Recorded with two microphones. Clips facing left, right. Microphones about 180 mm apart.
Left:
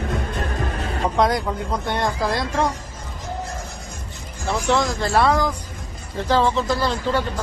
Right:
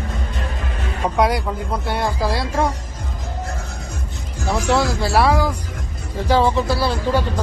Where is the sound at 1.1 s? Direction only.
10° right (ahead or behind).